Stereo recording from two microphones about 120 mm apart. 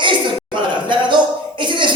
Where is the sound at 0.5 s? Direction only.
40° right (ahead or behind).